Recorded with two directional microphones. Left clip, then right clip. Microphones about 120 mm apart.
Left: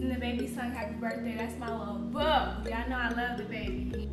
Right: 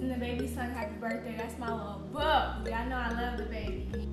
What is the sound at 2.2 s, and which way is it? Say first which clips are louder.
Speech: even; centre (ahead or behind).